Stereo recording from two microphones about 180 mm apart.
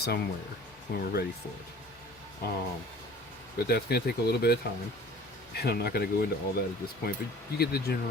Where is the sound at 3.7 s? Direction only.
60° left (ahead or behind).